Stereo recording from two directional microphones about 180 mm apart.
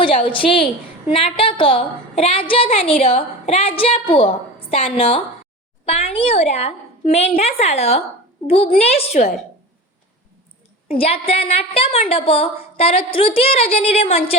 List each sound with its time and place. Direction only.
0.0 s a woman's voice: 30° left (ahead or behind)
10.8 s a woman's voice: 30° left (ahead or behind)